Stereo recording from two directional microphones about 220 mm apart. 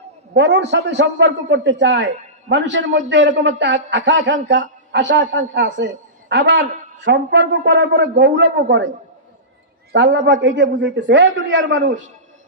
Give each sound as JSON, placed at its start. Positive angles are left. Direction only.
{"t": 0.3, "sound": "a man's voice", "side_deg": -50}
{"t": 9.9, "sound": "a man's voice", "side_deg": -55}